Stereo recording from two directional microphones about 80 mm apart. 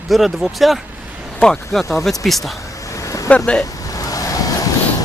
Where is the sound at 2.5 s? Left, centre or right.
Left.